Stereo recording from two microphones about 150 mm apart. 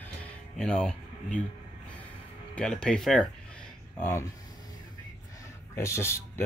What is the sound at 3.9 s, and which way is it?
Speech, 15° left (ahead or behind).